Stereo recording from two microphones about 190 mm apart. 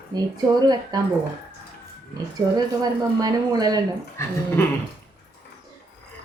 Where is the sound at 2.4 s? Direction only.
25° right (ahead or behind).